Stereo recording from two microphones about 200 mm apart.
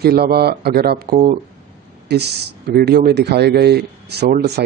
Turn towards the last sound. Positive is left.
turn(degrees=-55)  # may be behind; listen again after turning